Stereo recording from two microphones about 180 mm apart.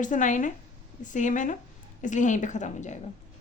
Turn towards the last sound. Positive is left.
turn(degrees=40)  # may be behind; listen again after turning